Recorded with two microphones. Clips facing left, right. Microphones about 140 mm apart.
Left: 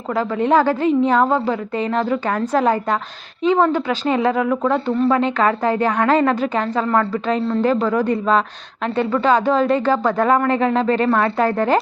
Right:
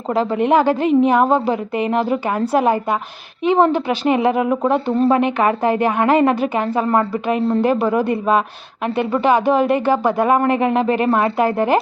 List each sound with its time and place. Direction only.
0.3 s speech: 15° right (ahead or behind)
3.5 s speech: 20° right (ahead or behind)
6.8 s a woman's voice: 25° right (ahead or behind)
7.7 s speech: 10° right (ahead or behind)